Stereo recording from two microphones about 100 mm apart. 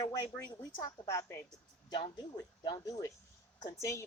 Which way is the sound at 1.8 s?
55° left (ahead or behind).